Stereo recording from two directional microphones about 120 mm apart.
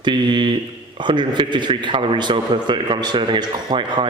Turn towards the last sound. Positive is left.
turn(degrees=-40)  # may be behind; listen again after turning